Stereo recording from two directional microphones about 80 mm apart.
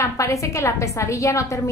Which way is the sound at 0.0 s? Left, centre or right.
Left.